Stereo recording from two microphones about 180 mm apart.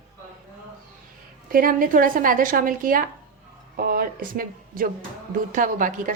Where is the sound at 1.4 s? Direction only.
50° right (ahead or behind).